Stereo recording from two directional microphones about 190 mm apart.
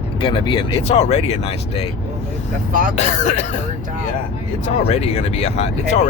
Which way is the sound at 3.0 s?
40° left (ahead or behind).